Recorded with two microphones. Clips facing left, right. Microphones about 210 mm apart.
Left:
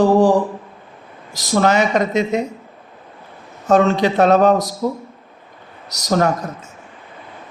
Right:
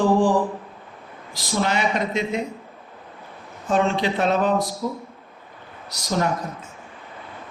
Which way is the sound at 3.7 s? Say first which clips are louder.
Left 7 dB; 40° left (ahead or behind).